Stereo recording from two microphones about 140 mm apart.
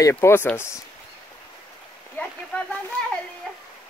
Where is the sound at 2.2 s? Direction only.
15° left (ahead or behind).